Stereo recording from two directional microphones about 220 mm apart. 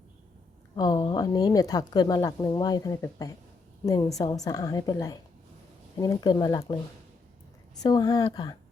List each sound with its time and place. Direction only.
0.8 s a woman's voice: 20° left (ahead or behind)
7.8 s speech: 15° left (ahead or behind)